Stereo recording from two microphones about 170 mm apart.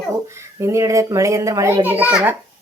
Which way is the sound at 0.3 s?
15° right (ahead or behind).